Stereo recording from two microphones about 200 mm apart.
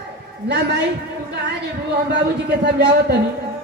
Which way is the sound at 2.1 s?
55° right (ahead or behind).